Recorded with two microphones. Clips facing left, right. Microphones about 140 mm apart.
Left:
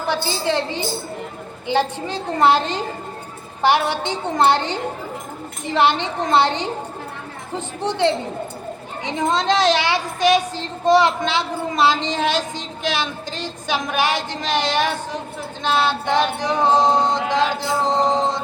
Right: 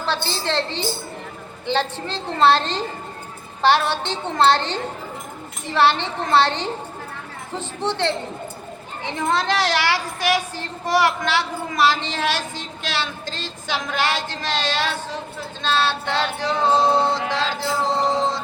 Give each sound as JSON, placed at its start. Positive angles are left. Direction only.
{"t": 0.0, "sound": "a woman's voice", "side_deg": 10}